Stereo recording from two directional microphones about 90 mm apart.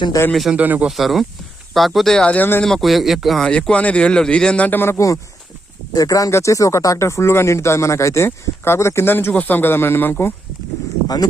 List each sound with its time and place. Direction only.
0.1 s speech: 40° left (ahead or behind)
0.5 s speech: 15° right (ahead or behind)
0.9 s speech: centre (ahead or behind); by 2.6 s 15° left (ahead or behind)
2.6 s speech: centre (ahead or behind); by 10.3 s 25° left (ahead or behind)